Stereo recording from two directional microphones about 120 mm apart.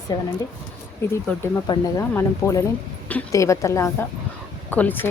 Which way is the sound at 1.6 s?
30° left (ahead or behind).